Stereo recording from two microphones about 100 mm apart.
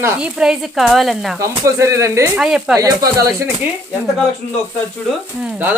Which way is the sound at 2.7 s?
35° right (ahead or behind).